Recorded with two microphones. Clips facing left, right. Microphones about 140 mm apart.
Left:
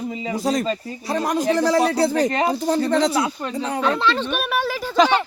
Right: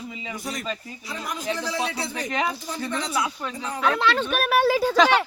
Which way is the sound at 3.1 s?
35° left (ahead or behind).